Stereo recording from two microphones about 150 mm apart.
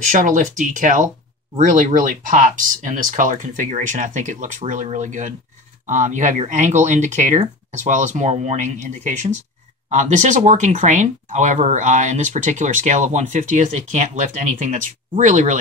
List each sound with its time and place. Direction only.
0.0 s speech: 55° right (ahead or behind)